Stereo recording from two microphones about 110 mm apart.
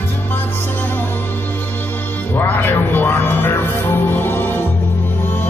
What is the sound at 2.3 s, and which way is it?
Music, 20° left (ahead or behind).